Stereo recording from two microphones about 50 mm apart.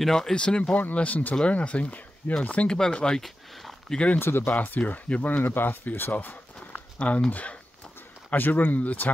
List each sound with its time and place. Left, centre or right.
0.0 s speech: centre
0.9 s speech: left
4.2 s speech: left
4.6 s speech: left
5.4 s speech: left
6.7 s a sound: left
7.2 s speech: left